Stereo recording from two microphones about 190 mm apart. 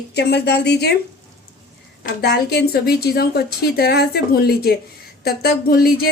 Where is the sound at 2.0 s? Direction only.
55° left (ahead or behind).